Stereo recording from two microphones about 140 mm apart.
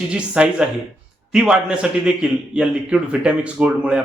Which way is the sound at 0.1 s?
5° right (ahead or behind).